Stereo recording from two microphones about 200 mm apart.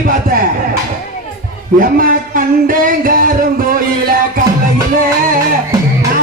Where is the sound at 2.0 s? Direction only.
45° right (ahead or behind).